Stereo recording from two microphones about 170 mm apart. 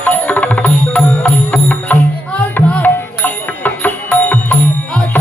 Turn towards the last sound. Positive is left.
turn(degrees=10)  # may be behind; listen again after turning